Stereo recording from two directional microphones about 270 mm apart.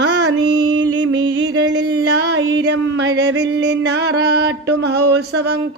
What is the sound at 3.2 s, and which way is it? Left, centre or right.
Music, right.